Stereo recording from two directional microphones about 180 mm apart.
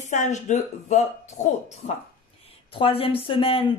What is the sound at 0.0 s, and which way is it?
Speech, 40° left (ahead or behind).